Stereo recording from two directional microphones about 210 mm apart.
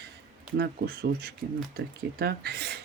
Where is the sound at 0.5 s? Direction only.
50° right (ahead or behind).